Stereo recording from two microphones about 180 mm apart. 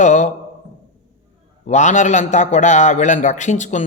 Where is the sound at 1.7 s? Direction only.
40° left (ahead or behind).